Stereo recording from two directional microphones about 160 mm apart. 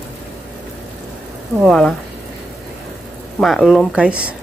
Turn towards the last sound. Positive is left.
turn(degrees=-5)  # may be behind; listen again after turning